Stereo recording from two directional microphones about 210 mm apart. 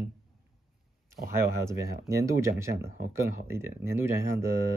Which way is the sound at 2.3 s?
15° right (ahead or behind).